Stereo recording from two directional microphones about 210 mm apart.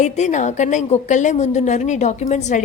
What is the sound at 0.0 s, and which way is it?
A woman's voice, 35° left (ahead or behind).